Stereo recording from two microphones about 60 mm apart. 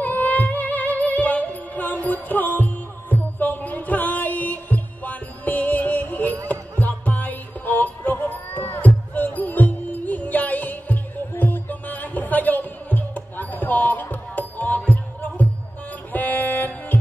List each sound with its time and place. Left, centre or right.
0.0 s music: left
16.1 s music: left